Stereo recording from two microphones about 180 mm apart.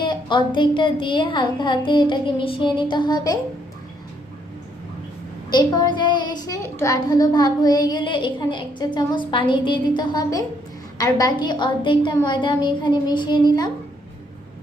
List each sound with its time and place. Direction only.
0.0 s a woman's voice: 25° left (ahead or behind)
5.5 s a woman's voice: 25° left (ahead or behind)